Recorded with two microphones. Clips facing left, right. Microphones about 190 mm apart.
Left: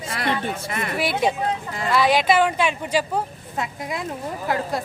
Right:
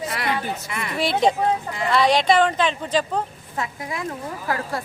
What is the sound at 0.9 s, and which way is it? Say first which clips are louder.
Speech: right 3 dB; 5° left (ahead or behind).